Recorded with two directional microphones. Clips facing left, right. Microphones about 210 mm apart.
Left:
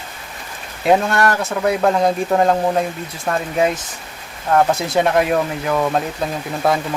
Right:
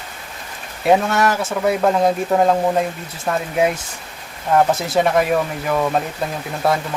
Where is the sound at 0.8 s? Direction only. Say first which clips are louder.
Even; centre (ahead or behind).